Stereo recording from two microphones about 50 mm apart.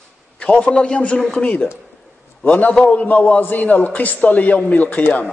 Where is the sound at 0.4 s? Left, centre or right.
Left.